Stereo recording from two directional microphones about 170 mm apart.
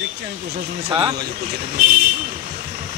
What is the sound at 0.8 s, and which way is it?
Speech, 25° right (ahead or behind).